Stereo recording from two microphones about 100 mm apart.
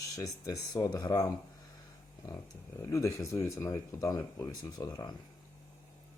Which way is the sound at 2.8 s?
30° left (ahead or behind).